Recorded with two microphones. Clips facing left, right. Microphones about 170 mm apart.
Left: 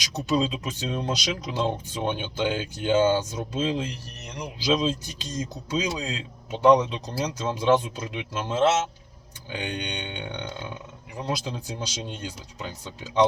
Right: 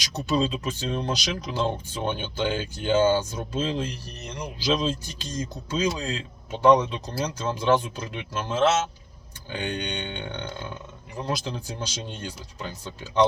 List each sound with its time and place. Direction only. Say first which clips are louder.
0.0 s speech: even; 15° left (ahead or behind)